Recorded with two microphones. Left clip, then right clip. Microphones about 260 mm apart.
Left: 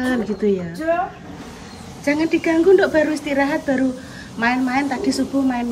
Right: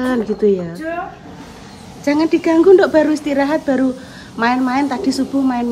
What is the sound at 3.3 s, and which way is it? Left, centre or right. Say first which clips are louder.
Speech: right 3 dB; right.